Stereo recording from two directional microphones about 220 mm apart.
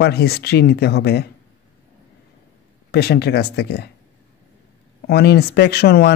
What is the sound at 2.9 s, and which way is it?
Speech, 45° left (ahead or behind).